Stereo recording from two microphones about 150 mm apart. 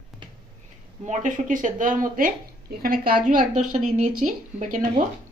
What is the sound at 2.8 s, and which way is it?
Speech, 75° right (ahead or behind).